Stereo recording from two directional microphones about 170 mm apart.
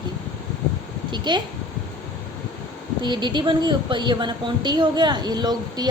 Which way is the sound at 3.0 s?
25° right (ahead or behind).